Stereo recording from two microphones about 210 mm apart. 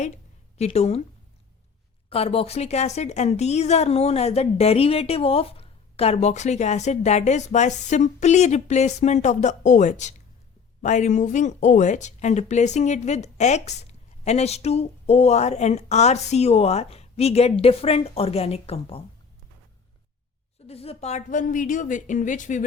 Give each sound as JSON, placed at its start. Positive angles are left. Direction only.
{"t": 0.6, "sound": "speech", "side_deg": 30}
{"t": 2.0, "sound": "a woman's voice", "side_deg": 30}
{"t": 20.7, "sound": "speech", "side_deg": 30}